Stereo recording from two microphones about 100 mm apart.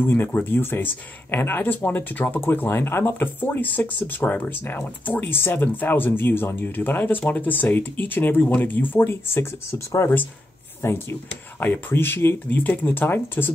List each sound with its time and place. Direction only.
0.0 s speech: 20° left (ahead or behind)